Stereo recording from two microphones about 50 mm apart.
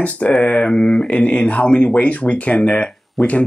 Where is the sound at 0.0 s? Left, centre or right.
Left.